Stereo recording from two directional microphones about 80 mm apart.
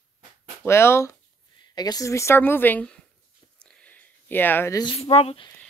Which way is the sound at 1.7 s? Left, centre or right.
Left.